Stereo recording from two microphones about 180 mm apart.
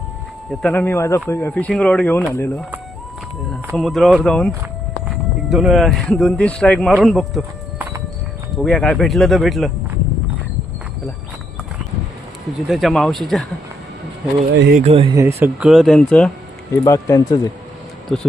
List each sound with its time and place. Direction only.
0.7 s speech: 15° left (ahead or behind)
3.8 s speech: centre (ahead or behind)
12.5 s speech: centre (ahead or behind)
14.5 s speech: 75° right (ahead or behind)
14.8 s speech: 35° right (ahead or behind)
15.1 s speech: 15° right (ahead or behind)
15.7 s speech: centre (ahead or behind)
16.8 s speech: 20° left (ahead or behind)
18.1 s speech: 5° left (ahead or behind)